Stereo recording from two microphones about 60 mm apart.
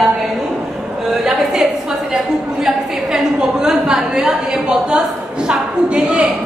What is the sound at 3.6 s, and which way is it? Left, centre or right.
A woman's voice, centre.